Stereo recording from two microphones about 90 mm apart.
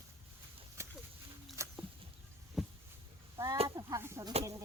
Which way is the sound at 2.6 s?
Centre (ahead or behind).